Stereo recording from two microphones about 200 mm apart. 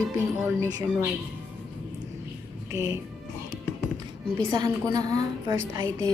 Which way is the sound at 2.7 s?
15° right (ahead or behind).